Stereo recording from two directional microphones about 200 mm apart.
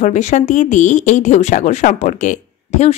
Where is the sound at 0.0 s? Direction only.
35° left (ahead or behind).